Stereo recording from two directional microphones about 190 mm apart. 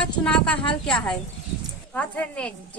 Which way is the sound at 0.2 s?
5° left (ahead or behind).